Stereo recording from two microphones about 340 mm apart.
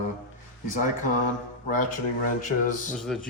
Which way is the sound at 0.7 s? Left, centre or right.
Left.